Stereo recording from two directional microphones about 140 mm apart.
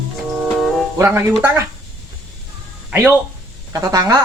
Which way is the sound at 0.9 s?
15° right (ahead or behind).